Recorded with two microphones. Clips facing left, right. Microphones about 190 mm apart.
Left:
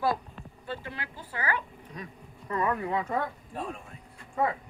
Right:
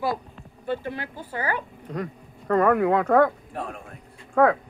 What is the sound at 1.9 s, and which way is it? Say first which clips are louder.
Speech: right 12 dB; 65° right (ahead or behind).